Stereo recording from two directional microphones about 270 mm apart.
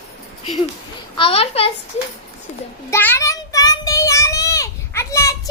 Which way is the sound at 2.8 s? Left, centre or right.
Centre.